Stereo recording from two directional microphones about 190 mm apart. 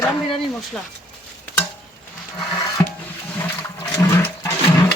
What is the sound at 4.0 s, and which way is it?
Toilet flush, 15° left (ahead or behind).